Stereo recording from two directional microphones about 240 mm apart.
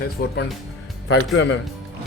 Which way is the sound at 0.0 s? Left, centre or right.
Left.